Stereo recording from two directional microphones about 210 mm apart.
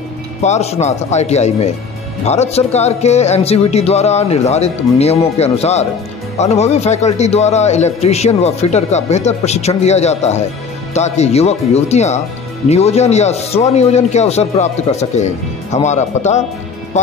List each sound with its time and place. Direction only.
0.4 s a man's voice: 30° left (ahead or behind)